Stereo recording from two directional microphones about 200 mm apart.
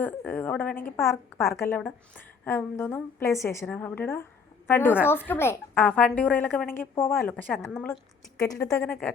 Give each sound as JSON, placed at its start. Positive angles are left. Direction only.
{"t": 0.0, "sound": "a woman's voice", "side_deg": 10}
{"t": 8.4, "sound": "a woman's voice", "side_deg": 15}
{"t": 8.8, "sound": "a woman's voice", "side_deg": 5}